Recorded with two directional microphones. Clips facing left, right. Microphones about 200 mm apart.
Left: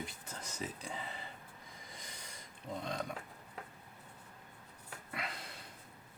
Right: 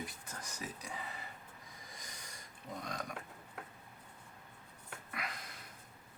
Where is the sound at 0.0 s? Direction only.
25° left (ahead or behind).